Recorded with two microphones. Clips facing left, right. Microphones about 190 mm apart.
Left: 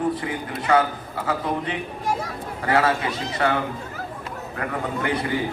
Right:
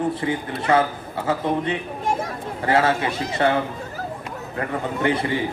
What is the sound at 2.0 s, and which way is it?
Chatter, 25° right (ahead or behind).